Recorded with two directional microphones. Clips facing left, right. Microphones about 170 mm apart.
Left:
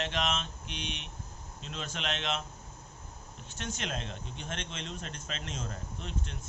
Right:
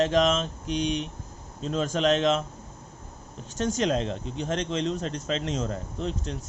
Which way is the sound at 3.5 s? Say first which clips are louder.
Right 13 dB; 40° right (ahead or behind).